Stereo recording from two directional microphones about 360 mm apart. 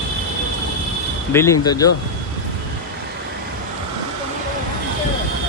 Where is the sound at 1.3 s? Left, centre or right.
Centre.